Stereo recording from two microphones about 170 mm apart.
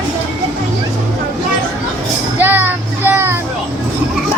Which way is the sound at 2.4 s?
10° right (ahead or behind).